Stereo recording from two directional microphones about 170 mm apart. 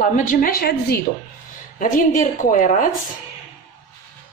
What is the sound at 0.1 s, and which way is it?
Speech, 50° left (ahead or behind).